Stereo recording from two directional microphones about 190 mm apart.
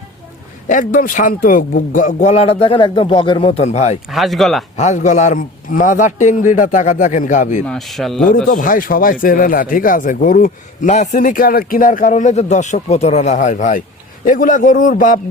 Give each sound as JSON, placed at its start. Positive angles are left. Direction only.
{"t": 0.7, "sound": "a man's voice", "side_deg": 45}
{"t": 4.1, "sound": "speech", "side_deg": 0}
{"t": 4.8, "sound": "a man's voice", "side_deg": 40}
{"t": 7.7, "sound": "speech", "side_deg": 0}
{"t": 8.4, "sound": "speech", "side_deg": 45}